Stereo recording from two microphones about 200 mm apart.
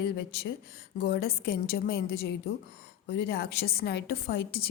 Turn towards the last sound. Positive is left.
turn(degrees=50)  # may be behind; listen again after turning